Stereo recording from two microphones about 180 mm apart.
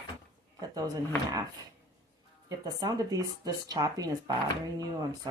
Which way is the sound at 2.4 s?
20° right (ahead or behind).